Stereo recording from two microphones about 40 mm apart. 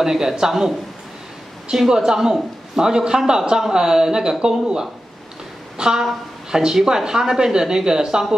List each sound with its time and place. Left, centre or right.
0.0 s a woman's voice: centre